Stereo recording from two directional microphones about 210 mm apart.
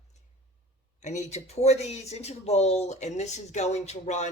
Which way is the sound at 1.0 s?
30° left (ahead or behind).